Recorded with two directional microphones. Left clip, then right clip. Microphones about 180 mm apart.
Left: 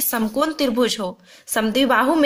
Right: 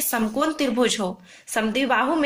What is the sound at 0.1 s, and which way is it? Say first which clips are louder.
Speech: left 2 dB; 40° left (ahead or behind).